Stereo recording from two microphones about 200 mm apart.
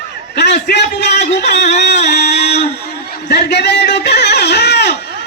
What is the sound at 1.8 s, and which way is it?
Music, 55° left (ahead or behind).